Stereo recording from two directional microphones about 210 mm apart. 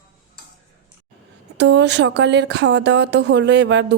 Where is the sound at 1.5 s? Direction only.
55° right (ahead or behind).